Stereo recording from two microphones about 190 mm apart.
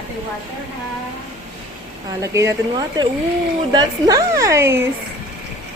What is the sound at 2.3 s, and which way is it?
A woman's voice, 20° right (ahead or behind).